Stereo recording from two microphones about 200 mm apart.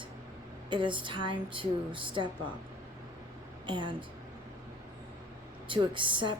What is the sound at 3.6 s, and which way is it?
Speech, 25° right (ahead or behind).